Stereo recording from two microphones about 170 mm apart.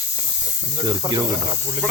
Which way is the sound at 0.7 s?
20° right (ahead or behind).